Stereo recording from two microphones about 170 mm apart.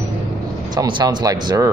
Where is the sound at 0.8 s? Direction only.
20° right (ahead or behind).